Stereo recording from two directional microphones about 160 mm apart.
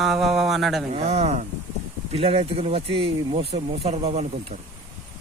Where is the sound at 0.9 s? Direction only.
40° right (ahead or behind).